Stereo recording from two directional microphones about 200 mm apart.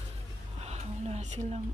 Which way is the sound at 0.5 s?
30° right (ahead or behind).